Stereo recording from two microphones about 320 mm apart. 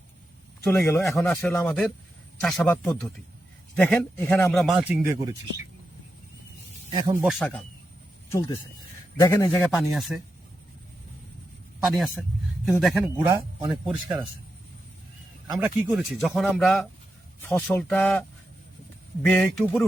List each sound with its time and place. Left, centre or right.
0.8 s a man's voice: centre
6.9 s a man's voice: centre
11.8 s a man's voice: centre
15.5 s a man's voice: centre